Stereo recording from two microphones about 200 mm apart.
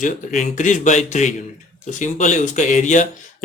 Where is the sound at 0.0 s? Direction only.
40° left (ahead or behind).